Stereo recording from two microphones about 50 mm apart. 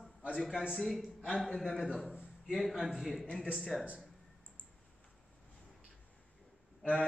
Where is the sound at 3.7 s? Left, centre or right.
Centre.